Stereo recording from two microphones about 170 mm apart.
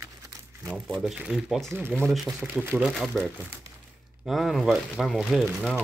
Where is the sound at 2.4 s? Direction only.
10° right (ahead or behind).